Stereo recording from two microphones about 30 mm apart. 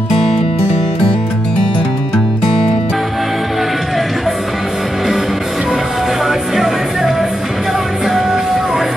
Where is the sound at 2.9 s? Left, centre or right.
Centre.